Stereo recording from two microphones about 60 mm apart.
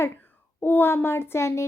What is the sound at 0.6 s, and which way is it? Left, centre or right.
Speech, left.